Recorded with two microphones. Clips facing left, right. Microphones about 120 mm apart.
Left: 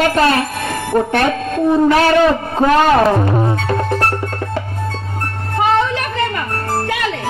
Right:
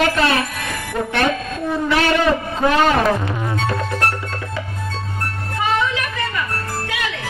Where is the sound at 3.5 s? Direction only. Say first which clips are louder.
Left 4 dB; 50° left (ahead or behind).